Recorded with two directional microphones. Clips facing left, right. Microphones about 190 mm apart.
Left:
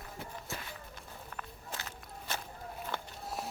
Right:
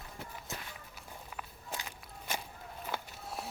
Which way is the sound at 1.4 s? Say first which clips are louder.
Right 1 dB; 10° right (ahead or behind).